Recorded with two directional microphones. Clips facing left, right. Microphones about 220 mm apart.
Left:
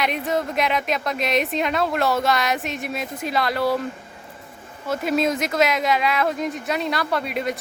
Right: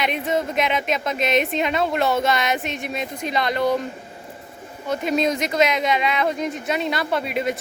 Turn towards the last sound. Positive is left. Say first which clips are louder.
# right 1 dB
turn(degrees=0)  # may be behind; listen again after turning